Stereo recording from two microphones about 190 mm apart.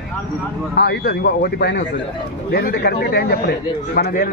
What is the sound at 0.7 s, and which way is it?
Music, 60° left (ahead or behind).